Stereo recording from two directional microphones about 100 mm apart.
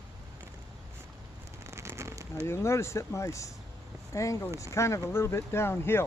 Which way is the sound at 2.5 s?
25° left (ahead or behind).